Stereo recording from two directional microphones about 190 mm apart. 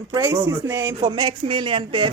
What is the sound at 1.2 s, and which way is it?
Speech, 25° right (ahead or behind).